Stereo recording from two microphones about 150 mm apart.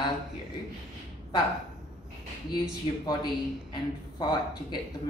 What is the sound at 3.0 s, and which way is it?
A woman's voice, 30° left (ahead or behind).